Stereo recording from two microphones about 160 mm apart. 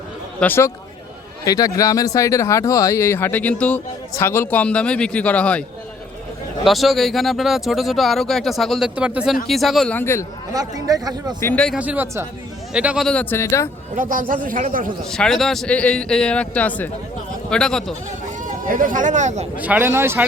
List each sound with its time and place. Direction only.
0.3 s a man's voice: 10° left (ahead or behind)
1.5 s a man's voice: 25° left (ahead or behind); by 5.6 s 5° left (ahead or behind)
6.7 s speech: centre (ahead or behind)
10.0 s a man's voice: 15° left (ahead or behind)
10.5 s speech: 25° right (ahead or behind)
11.3 s a man's voice: 10° left (ahead or behind)
11.8 s speech: 10° right (ahead or behind)
13.1 s a man's voice: 5° left (ahead or behind)
13.4 s a man's voice: 20° left (ahead or behind)
13.9 s speech: 55° right (ahead or behind)
15.1 s speech: 5° left (ahead or behind)
18.4 s speech: 55° right (ahead or behind)
19.5 s speech: 10° right (ahead or behind)